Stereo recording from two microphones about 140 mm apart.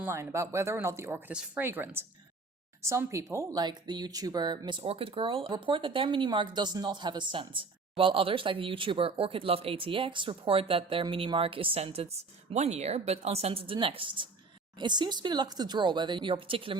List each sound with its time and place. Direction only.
0.0 s speech: 15° right (ahead or behind); by 16.7 s 40° right (ahead or behind)